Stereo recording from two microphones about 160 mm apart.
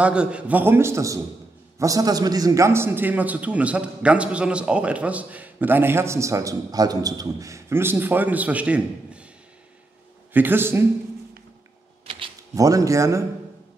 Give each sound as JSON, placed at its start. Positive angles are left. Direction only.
{"t": 0.0, "sound": "a man's voice", "side_deg": -5}
{"t": 10.3, "sound": "a man's voice", "side_deg": -10}
{"t": 12.5, "sound": "speech", "side_deg": -20}